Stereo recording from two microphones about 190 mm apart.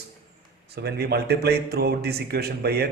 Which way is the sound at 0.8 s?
60° right (ahead or behind).